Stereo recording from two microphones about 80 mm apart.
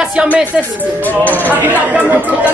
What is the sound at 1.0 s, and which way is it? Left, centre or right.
Music, left.